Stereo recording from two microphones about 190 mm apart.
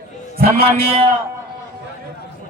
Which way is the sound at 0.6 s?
30° right (ahead or behind).